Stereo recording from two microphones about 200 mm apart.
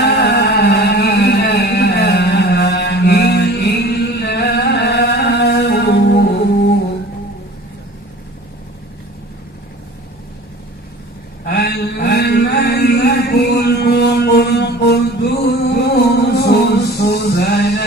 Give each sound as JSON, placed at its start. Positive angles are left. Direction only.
{"t": 0.2, "sound": "music", "side_deg": 55}
{"t": 11.4, "sound": "chant", "side_deg": 55}